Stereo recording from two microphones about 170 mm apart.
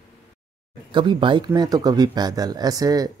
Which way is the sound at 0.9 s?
30° right (ahead or behind).